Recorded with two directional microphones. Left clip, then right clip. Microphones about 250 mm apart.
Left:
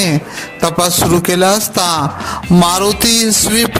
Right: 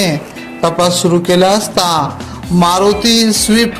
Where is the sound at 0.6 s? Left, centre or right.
Left.